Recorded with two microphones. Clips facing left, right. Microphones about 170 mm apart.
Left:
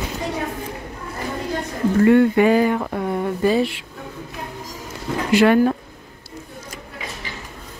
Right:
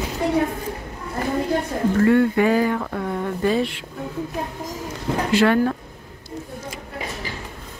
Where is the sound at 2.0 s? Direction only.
20° left (ahead or behind).